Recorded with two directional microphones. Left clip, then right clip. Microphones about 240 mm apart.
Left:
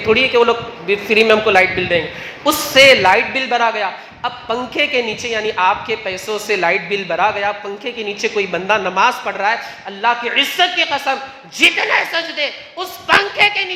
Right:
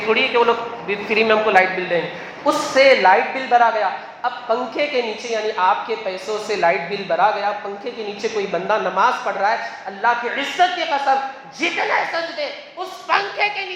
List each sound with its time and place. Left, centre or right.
0.1 s a man's voice: left